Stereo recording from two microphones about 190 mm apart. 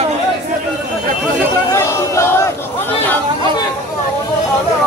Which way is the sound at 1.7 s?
15° left (ahead or behind).